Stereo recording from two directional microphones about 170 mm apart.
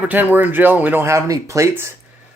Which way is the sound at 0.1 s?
10° right (ahead or behind).